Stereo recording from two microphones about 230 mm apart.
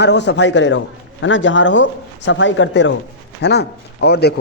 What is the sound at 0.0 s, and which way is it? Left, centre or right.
A man's voice, left.